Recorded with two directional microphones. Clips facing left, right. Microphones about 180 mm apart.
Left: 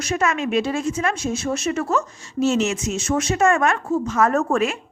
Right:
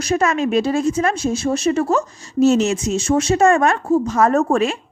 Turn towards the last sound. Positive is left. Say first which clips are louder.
# right 3 dB
turn(degrees=-30)  # may be behind; listen again after turning